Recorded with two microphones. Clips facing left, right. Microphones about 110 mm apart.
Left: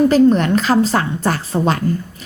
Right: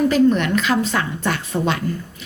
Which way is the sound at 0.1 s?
40° left (ahead or behind).